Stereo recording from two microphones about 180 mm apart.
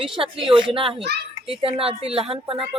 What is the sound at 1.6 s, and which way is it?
Music, 30° right (ahead or behind).